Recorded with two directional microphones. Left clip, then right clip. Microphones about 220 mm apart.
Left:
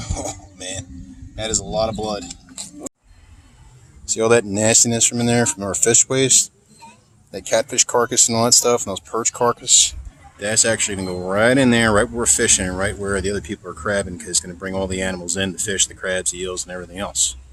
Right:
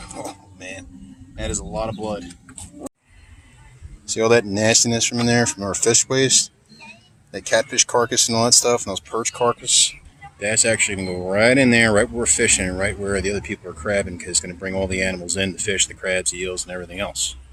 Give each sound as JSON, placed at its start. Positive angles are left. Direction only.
{"t": 0.3, "sound": "a sound", "side_deg": 25}
{"t": 1.7, "sound": "speech", "side_deg": 30}
{"t": 4.0, "sound": "speech", "side_deg": 0}